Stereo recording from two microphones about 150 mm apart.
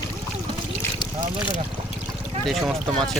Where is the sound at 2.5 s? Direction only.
Centre (ahead or behind).